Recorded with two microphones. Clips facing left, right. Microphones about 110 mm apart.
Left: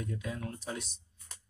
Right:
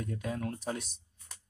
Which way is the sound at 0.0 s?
50° right (ahead or behind).